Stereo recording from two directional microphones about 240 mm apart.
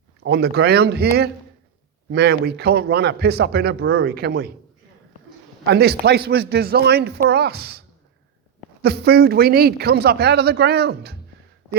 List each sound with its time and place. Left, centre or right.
0.2 s a man's voice: right
2.0 s speech: right
5.6 s a man's voice: right
8.8 s speech: right